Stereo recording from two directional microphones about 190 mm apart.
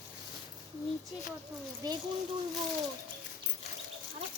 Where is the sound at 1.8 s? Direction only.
20° right (ahead or behind).